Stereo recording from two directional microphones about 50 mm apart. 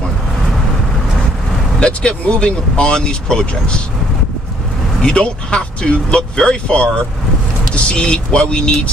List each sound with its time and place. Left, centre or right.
1.8 s speech: left
5.0 s speech: left